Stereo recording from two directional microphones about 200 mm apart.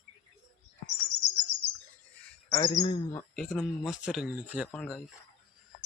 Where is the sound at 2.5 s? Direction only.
30° left (ahead or behind).